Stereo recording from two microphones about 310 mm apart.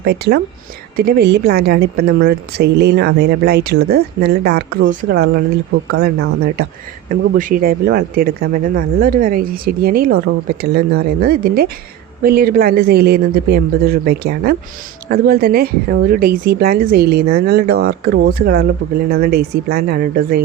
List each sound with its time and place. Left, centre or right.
0.0 s a woman's voice: right